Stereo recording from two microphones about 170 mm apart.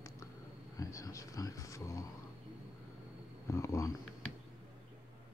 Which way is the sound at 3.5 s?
15° left (ahead or behind).